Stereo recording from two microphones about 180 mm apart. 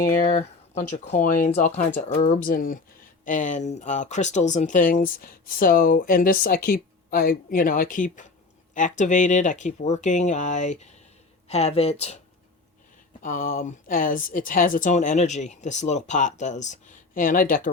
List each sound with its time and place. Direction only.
0.2 s speech: 40° left (ahead or behind)
13.2 s speech: 50° left (ahead or behind)